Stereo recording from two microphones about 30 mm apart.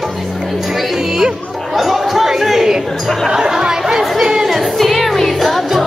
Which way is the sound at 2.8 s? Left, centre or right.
Centre.